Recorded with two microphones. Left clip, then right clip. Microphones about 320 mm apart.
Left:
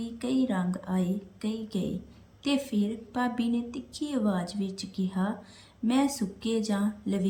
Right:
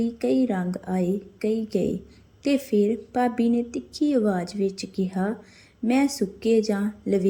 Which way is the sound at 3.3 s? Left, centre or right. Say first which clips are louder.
Right 7 dB; right.